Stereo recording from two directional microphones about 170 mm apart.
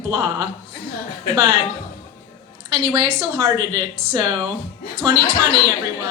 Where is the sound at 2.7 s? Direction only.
25° right (ahead or behind).